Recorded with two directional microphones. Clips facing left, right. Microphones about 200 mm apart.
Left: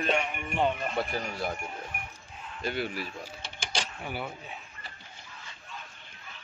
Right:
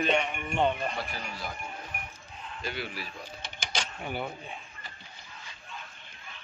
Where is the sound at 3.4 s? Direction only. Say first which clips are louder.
Even; 30° left (ahead or behind).